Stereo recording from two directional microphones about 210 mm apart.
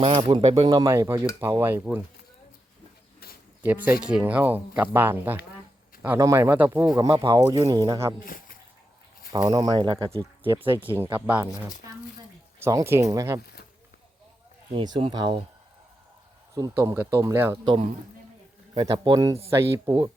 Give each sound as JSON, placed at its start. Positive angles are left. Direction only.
{"t": 0.0, "sound": "speech", "side_deg": -25}
{"t": 3.6, "sound": "speech", "side_deg": -10}
{"t": 8.2, "sound": "speech", "side_deg": 40}
{"t": 9.3, "sound": "speech", "side_deg": -20}
{"t": 11.3, "sound": "speech", "side_deg": -5}
{"t": 14.7, "sound": "speech", "side_deg": -25}
{"t": 16.6, "sound": "speech", "side_deg": -15}
{"t": 18.7, "sound": "speech", "side_deg": -20}